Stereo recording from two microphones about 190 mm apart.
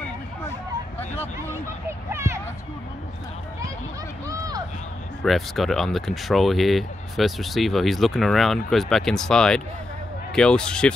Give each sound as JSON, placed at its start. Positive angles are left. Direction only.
{"t": 1.9, "sound": "a sound", "side_deg": -15}
{"t": 4.3, "sound": "run", "side_deg": -20}
{"t": 5.2, "sound": "speech", "side_deg": 0}